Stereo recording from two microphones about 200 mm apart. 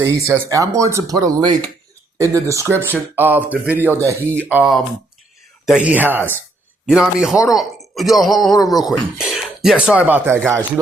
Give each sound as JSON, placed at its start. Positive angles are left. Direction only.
{"t": 0.3, "sound": "a man's voice", "side_deg": -15}